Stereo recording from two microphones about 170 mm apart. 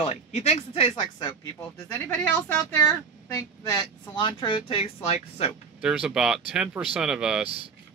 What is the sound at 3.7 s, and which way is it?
Speech, 25° left (ahead or behind).